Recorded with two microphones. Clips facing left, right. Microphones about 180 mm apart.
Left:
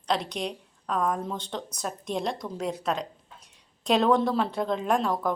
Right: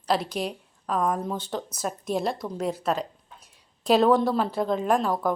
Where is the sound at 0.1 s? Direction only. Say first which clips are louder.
Right 2 dB; 5° right (ahead or behind).